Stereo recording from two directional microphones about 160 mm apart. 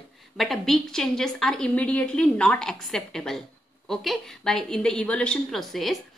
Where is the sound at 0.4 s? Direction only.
Centre (ahead or behind).